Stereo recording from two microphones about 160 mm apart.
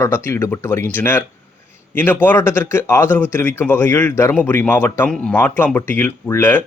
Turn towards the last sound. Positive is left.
turn(degrees=15)  # may be behind; listen again after turning